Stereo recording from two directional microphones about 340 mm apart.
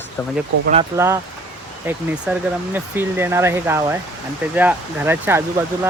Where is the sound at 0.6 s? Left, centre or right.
Centre.